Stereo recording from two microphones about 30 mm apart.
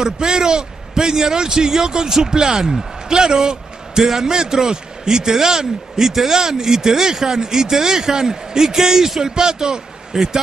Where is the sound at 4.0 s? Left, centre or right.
Centre.